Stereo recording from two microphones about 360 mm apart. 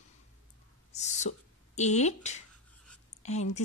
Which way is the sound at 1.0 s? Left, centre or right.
Centre.